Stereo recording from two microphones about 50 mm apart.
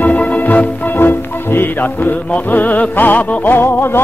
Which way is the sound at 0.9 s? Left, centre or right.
Left.